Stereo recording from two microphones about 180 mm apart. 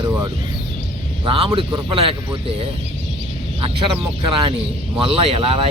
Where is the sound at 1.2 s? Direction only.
25° right (ahead or behind).